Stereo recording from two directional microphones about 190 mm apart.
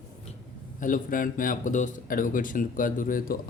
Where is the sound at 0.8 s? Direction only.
45° left (ahead or behind).